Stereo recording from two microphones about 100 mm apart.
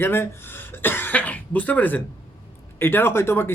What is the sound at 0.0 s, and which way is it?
Speech, 20° left (ahead or behind).